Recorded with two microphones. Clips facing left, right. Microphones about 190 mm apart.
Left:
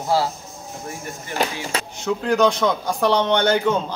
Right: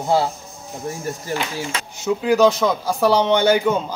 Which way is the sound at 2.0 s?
5° right (ahead or behind).